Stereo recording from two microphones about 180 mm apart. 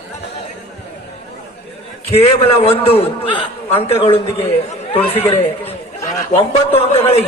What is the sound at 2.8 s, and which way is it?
A man's voice, 35° left (ahead or behind).